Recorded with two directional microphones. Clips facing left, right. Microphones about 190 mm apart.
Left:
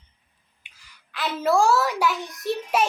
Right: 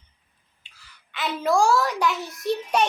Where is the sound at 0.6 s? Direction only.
15° left (ahead or behind).